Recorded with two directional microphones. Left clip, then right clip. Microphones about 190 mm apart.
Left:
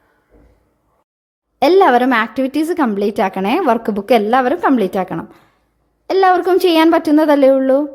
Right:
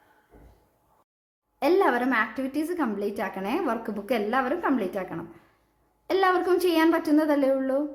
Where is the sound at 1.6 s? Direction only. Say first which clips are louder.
Left 12 dB; 50° left (ahead or behind).